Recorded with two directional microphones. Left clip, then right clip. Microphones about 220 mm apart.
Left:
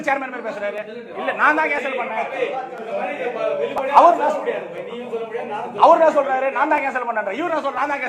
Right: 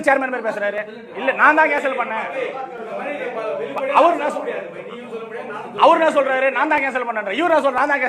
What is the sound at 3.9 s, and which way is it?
Speech, 40° right (ahead or behind).